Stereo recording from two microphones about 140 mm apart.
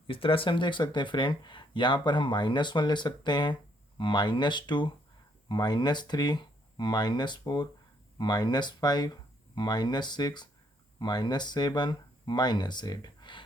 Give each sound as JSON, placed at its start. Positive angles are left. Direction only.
{"t": 0.1, "sound": "speech", "side_deg": 40}